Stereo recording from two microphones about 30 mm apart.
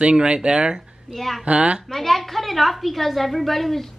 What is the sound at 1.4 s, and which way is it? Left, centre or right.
Speech, right.